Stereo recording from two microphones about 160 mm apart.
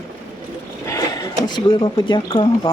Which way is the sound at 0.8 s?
20° left (ahead or behind).